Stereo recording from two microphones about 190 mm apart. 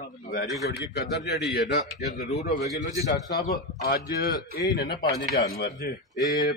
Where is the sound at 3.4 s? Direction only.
50° left (ahead or behind).